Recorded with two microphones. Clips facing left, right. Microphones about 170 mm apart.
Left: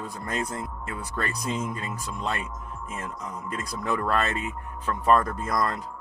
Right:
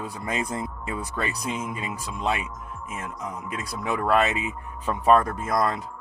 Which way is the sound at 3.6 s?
10° right (ahead or behind).